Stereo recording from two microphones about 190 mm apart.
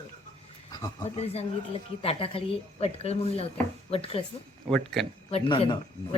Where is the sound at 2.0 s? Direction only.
30° left (ahead or behind).